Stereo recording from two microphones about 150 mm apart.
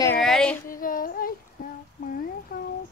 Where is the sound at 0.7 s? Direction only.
70° left (ahead or behind).